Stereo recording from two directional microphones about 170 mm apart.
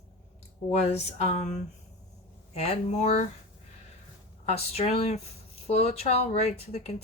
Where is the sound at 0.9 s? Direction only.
40° left (ahead or behind).